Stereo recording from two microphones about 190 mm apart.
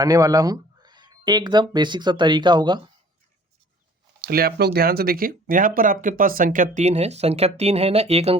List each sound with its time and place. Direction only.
0.0 s speech: 20° right (ahead or behind)
4.2 s speech: 55° right (ahead or behind); by 8.4 s 35° right (ahead or behind)